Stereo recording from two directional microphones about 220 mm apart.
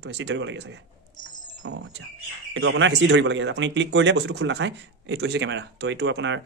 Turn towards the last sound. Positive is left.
turn(degrees=-55)  # may be behind; listen again after turning